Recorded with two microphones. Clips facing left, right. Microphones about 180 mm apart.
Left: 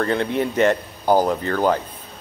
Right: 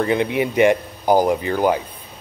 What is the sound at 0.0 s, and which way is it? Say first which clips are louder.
Speech: right 2 dB; 15° right (ahead or behind).